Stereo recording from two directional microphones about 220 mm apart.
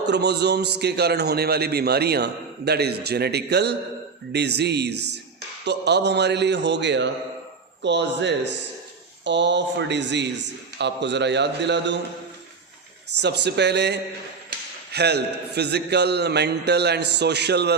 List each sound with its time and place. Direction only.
0.0 s a man's voice: 50° right (ahead or behind)
13.2 s a man's voice: 50° right (ahead or behind)